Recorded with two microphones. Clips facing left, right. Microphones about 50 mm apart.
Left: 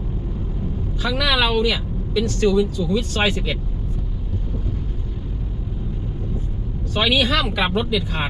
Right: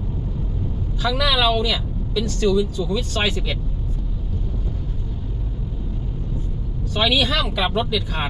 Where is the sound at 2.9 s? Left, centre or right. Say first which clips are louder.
Left 3 dB; centre.